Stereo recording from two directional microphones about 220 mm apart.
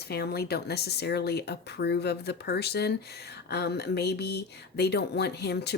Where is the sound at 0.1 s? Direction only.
45° left (ahead or behind).